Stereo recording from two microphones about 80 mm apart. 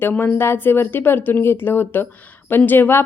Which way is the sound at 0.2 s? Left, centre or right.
Left.